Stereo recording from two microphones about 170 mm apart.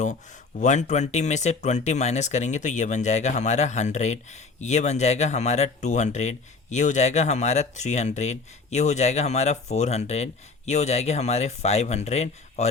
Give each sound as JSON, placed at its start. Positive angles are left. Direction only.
{"t": 0.6, "sound": "speech", "side_deg": 45}